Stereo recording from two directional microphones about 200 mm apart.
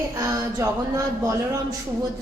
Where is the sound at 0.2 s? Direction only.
15° right (ahead or behind).